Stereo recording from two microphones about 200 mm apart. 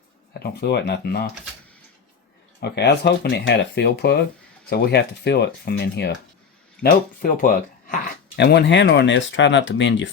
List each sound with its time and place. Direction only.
0.3 s speech: 55° left (ahead or behind)
2.6 s speech: 55° left (ahead or behind)
7.2 s speech: 45° left (ahead or behind)
8.4 s speech: 60° left (ahead or behind)